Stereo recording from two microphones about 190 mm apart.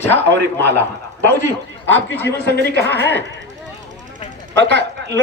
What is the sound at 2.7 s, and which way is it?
Speech, 65° right (ahead or behind).